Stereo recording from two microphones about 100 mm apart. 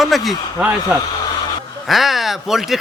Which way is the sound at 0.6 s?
20° right (ahead or behind).